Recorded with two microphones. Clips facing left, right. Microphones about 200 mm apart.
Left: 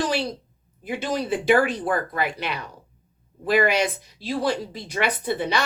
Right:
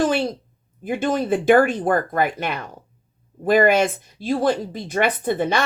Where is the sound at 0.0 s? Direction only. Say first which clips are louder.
Right 5 dB; 50° right (ahead or behind).